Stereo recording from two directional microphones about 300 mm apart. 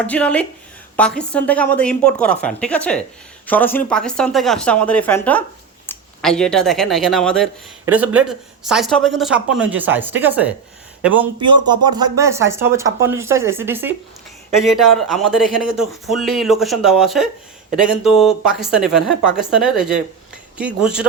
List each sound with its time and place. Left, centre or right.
0.0 s speech: centre